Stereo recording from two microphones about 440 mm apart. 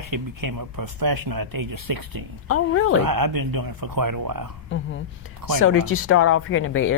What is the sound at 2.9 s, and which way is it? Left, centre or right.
A man's voice, right.